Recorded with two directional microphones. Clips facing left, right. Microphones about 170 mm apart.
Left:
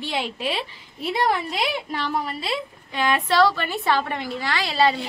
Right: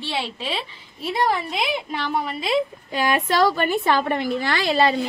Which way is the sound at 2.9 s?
45° right (ahead or behind).